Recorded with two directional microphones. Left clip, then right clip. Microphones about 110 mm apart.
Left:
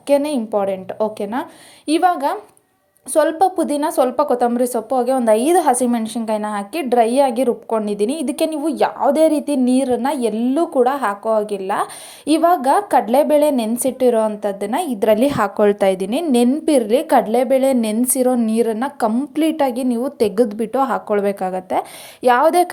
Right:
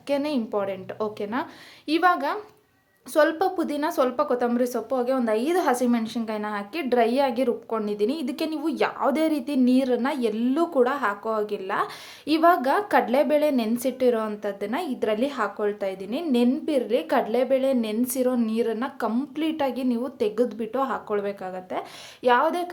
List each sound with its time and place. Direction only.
0.1 s a woman's voice: 35° left (ahead or behind); by 16.2 s 90° left
16.6 s speech: 75° left (ahead or behind)
17.9 s a woman's voice: 50° left (ahead or behind); by 22.7 s 80° left